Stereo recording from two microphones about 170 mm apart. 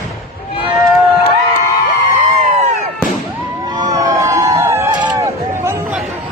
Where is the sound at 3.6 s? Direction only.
25° right (ahead or behind).